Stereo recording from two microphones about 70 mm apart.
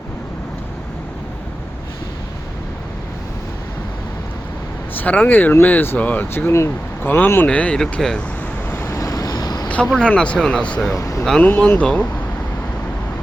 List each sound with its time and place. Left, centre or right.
4.9 s speech: left
6.5 s speech: left
7.1 s speech: left
7.4 s speech: centre
8.7 s vehicle: left
9.0 s vehicle: left
9.6 s vehicle: centre
9.9 s speech: centre
10.9 s speech: left
11.4 s speech: centre